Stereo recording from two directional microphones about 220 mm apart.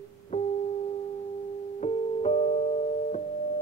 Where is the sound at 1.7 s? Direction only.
30° left (ahead or behind).